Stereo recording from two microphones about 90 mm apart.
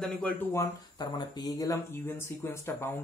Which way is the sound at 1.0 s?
50° left (ahead or behind).